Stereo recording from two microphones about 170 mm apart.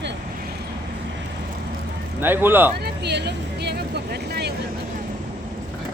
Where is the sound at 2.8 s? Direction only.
80° right.